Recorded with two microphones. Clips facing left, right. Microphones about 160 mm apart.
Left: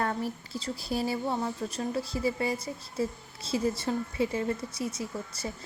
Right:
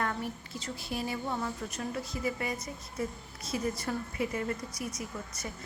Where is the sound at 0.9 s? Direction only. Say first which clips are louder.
Left 5 dB; 35° left (ahead or behind).